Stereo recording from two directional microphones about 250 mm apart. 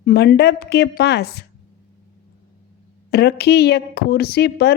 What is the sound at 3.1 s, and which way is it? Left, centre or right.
A woman's voice, left.